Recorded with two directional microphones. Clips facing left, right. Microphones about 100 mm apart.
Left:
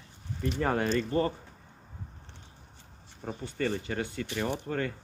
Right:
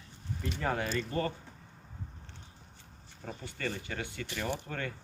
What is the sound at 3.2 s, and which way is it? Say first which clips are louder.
Speech: left 6 dB; 30° left (ahead or behind).